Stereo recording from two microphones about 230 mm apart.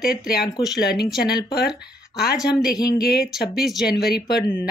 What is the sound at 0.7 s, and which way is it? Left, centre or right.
Speech, centre.